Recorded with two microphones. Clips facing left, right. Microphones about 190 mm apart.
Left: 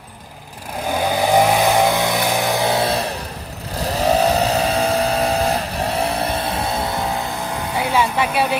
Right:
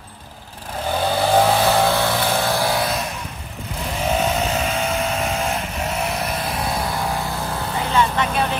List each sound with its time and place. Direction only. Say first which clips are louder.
0.9 s vehicle: left 1 dB; 15° left (ahead or behind)
7.7 s vehicle: left 1 dB; 10° left (ahead or behind)